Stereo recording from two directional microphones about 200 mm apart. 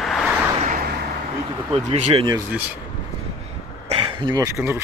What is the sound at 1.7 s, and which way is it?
Speech, 30° right (ahead or behind).